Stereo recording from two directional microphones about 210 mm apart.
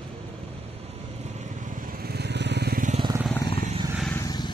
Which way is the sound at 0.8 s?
30° right (ahead or behind).